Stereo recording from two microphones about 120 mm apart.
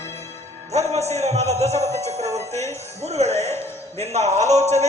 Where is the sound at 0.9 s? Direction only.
65° right (ahead or behind).